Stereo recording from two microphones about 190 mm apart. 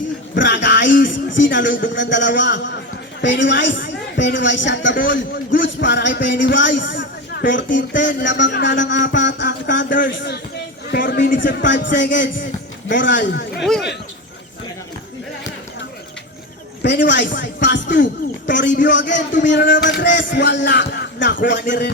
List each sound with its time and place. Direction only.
0.3 s music: 75° left (ahead or behind)
1.0 s a woman's voice: 75° left (ahead or behind)
6.7 s a sound: 75° left (ahead or behind)
7.9 s speech: 70° left (ahead or behind)
10.9 s a man's voice: 65° left (ahead or behind)
13.6 s speech: centre (ahead or behind)
16.8 s speech: 65° left (ahead or behind)